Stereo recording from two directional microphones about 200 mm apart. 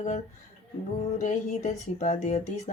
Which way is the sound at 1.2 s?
35° left (ahead or behind).